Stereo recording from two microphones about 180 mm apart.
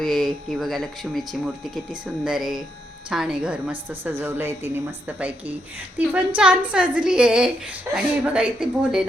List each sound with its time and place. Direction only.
0.0 s a woman's voice: centre (ahead or behind)